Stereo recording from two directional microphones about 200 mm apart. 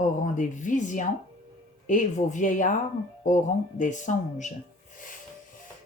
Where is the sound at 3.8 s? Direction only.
40° left (ahead or behind).